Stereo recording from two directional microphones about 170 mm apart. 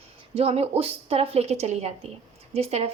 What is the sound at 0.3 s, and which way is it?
A woman's voice, 35° right (ahead or behind).